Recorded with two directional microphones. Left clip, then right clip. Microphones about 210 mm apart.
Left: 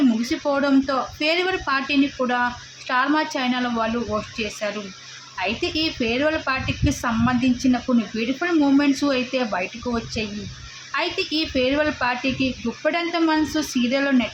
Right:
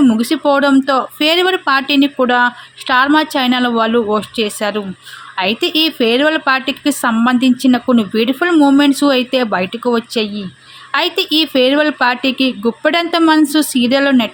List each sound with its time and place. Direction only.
0.2 s a woman's voice: 45° right (ahead or behind)